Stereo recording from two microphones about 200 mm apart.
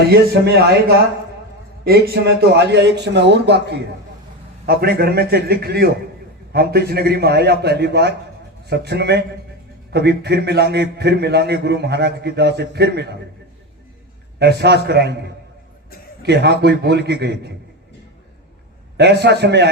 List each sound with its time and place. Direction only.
0.1 s a man's voice: 55° right (ahead or behind)
14.3 s a man's voice: 55° right (ahead or behind)
16.2 s a man's voice: 55° right (ahead or behind)
18.9 s a man's voice: 55° right (ahead or behind)